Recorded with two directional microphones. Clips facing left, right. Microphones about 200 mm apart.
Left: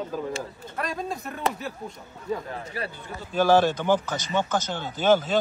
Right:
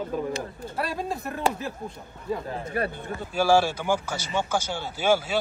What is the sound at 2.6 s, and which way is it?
Speech, 55° right (ahead or behind).